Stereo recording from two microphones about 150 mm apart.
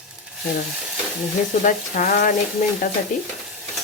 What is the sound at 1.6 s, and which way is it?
Frying, 60° left (ahead or behind).